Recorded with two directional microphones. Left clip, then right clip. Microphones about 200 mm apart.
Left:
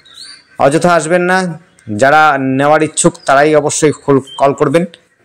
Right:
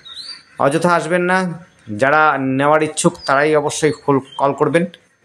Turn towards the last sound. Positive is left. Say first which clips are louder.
# left 4 dB
turn(degrees=20)  # may be behind; listen again after turning